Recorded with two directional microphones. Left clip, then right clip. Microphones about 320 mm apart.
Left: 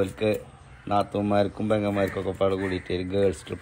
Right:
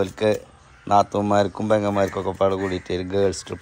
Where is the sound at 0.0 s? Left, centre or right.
Centre.